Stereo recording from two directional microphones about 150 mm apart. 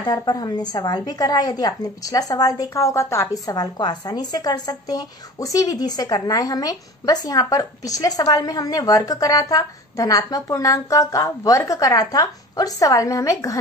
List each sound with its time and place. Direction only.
0.0 s a woman's voice: 25° left (ahead or behind)